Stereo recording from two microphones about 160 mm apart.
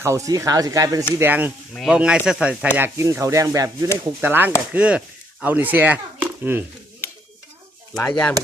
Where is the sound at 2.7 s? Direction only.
15° right (ahead or behind).